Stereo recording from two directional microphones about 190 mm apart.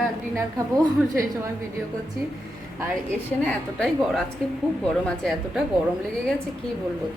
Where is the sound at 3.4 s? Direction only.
5° left (ahead or behind).